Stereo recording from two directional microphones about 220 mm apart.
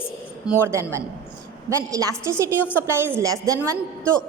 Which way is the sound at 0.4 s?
10° right (ahead or behind).